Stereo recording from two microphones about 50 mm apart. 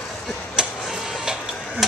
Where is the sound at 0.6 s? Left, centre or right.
Centre.